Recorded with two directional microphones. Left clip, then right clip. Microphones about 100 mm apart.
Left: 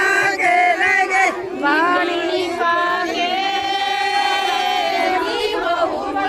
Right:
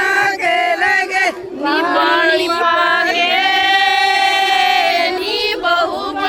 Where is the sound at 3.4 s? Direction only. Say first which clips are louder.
Right 6 dB; 20° left (ahead or behind).